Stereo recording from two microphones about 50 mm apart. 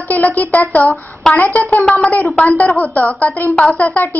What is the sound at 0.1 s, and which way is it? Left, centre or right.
A woman's voice, left.